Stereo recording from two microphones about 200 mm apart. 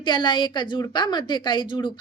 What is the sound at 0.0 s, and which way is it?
A woman's voice, 20° left (ahead or behind).